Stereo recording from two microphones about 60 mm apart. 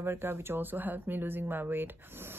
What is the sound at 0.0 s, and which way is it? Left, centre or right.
Speech, right.